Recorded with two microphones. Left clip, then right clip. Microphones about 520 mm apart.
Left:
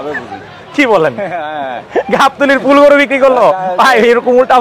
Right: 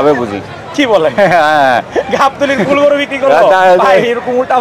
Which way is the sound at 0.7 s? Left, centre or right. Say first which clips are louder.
Even; left.